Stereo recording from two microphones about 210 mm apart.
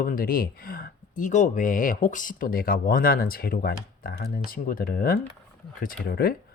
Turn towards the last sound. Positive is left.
turn(degrees=45)  # may be behind; listen again after turning